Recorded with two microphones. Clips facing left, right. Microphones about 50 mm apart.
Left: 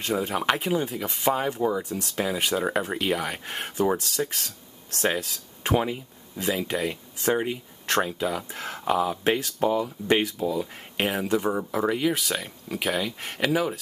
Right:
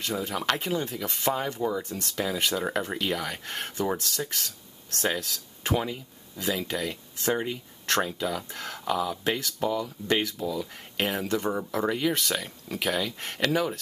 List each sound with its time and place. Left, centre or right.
0.0 s speech: left
0.6 s speech: centre
5.8 s speech: left
6.4 s speech: centre
11.1 s speech: centre